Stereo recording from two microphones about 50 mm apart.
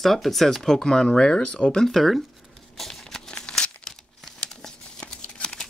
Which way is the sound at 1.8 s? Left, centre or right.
Centre.